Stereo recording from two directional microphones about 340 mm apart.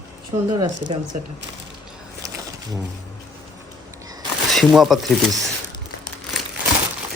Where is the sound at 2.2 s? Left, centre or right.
Centre.